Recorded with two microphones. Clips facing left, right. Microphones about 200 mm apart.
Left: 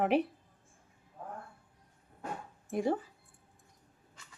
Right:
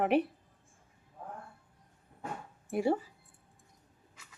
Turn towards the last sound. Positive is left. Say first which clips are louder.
# right 2 dB
turn(degrees=-10)  # may be behind; listen again after turning